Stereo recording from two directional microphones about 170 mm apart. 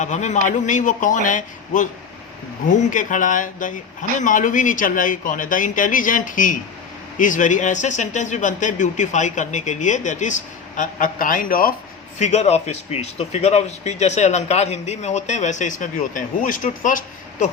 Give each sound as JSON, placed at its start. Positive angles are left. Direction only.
{"t": 0.0, "sound": "speech", "side_deg": 45}
{"t": 12.2, "sound": "speech", "side_deg": 40}